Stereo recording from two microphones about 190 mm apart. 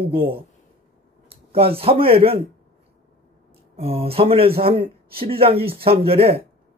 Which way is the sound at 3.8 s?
30° right (ahead or behind).